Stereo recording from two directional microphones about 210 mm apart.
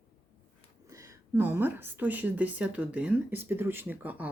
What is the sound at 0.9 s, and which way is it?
A woman's voice, 15° right (ahead or behind).